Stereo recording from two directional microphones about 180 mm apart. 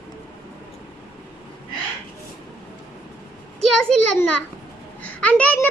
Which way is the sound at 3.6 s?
5° left (ahead or behind).